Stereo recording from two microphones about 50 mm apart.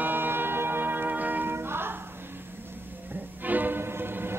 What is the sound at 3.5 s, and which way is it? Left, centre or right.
Music, right.